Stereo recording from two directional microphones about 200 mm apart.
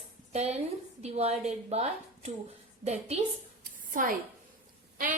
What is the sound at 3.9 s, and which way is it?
Speech, 45° right (ahead or behind).